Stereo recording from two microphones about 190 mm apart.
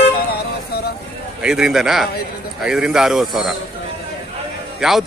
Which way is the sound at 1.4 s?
5° right (ahead or behind).